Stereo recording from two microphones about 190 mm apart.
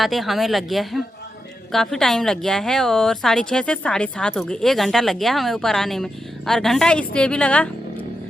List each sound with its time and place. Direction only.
0.0 s a woman's voice: centre (ahead or behind)